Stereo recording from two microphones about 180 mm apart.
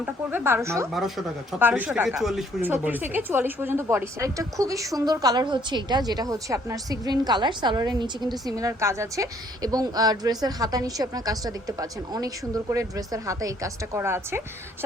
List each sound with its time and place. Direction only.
0.0 s a woman's voice: 10° right (ahead or behind)